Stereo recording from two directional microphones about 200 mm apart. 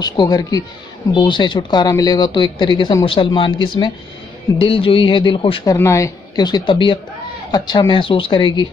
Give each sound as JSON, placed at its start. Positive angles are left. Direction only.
{"t": 0.0, "sound": "speech", "side_deg": 20}
{"t": 5.8, "sound": "speech", "side_deg": 15}